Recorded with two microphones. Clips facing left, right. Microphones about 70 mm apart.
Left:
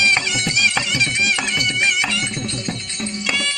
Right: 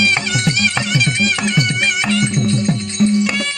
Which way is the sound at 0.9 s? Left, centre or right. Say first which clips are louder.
Right 3 dB; right.